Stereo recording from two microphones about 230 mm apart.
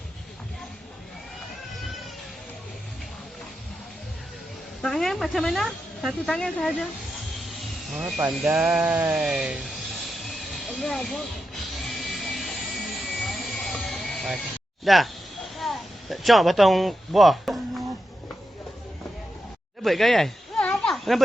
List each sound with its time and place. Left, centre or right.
4.8 s a woman's voice: centre
10.7 s speech: centre
11.7 s music: centre
13.0 s jet engine: centre
14.8 s a sound: centre
19.8 s a sound: centre